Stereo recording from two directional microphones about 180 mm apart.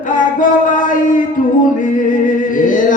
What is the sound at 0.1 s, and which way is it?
Music, 45° left (ahead or behind).